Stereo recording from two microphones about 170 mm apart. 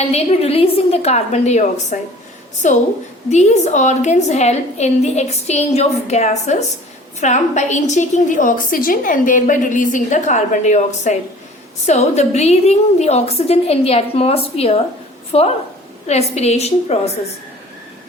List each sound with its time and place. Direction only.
0.1 s a woman's voice: 35° left (ahead or behind)